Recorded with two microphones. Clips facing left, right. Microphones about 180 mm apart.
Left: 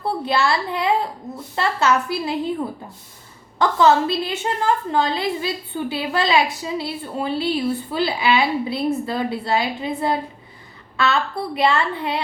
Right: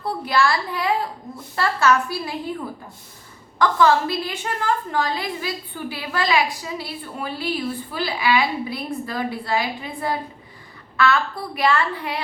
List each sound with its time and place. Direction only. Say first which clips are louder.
0.0 s a child's voice: even; 25° left (ahead or behind)
3.6 s a woman's voice: left 1 dB; 25° left (ahead or behind)